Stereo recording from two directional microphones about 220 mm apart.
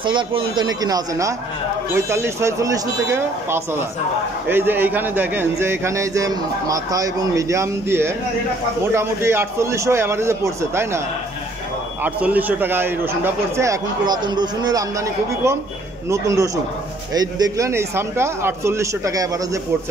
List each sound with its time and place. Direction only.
0.0 s a man's voice: 25° right (ahead or behind)
12.0 s a man's voice: 5° right (ahead or behind)